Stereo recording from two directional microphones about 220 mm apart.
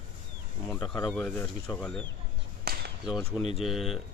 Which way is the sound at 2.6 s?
45° right (ahead or behind).